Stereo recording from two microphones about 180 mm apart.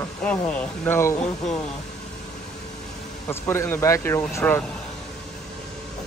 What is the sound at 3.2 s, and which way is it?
Speech, 15° left (ahead or behind).